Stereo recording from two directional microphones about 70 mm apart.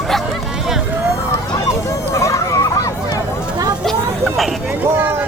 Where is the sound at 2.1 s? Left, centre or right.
Left.